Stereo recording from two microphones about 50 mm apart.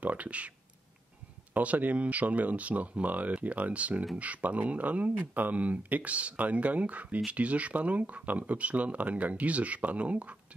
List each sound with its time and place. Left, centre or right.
0.0 s speech: right
1.5 s speech: right